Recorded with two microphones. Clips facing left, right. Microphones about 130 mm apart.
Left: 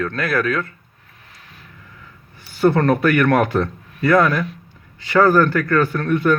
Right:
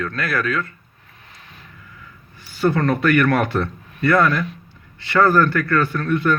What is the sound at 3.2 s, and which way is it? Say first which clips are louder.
A man's voice: left 2 dB; 20° left (ahead or behind).